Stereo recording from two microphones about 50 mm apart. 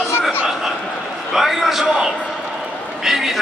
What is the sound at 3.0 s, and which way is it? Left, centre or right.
Speech, centre.